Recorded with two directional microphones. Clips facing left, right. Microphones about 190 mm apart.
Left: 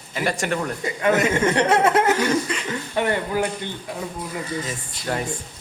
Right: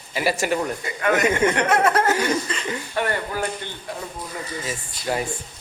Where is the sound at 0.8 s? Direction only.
20° left (ahead or behind).